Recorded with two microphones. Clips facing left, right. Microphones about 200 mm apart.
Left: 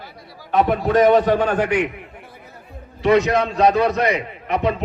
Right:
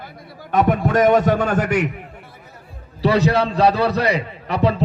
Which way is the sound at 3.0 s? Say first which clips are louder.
Left 1 dB; 35° right (ahead or behind).